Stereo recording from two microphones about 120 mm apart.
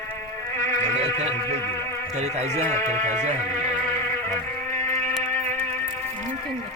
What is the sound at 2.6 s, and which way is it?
Speech, 20° left (ahead or behind).